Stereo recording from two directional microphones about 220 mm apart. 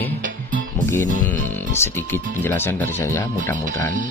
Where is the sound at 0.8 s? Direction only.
10° left (ahead or behind).